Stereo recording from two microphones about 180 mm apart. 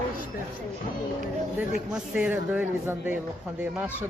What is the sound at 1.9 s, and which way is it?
Speech, 10° right (ahead or behind).